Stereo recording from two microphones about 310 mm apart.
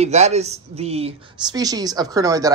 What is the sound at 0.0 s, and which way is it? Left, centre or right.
Speech, right.